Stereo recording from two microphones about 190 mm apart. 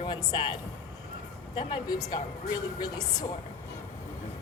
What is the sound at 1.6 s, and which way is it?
A woman's voice, 25° left (ahead or behind).